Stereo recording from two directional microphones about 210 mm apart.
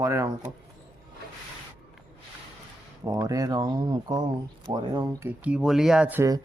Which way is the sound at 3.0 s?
15° right (ahead or behind).